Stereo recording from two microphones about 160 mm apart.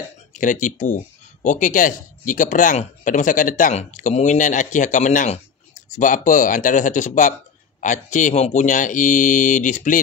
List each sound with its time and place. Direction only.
0.3 s speech: 55° left (ahead or behind)